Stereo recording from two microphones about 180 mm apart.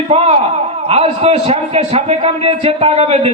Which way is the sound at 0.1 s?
35° right (ahead or behind).